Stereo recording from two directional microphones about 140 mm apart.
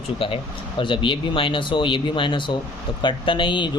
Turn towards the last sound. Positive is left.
turn(degrees=35)  # may be behind; listen again after turning